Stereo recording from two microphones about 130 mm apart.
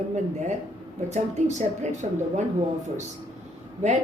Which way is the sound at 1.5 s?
60° right (ahead or behind).